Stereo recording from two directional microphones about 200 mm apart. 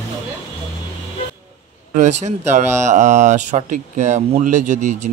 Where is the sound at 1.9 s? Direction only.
35° right (ahead or behind).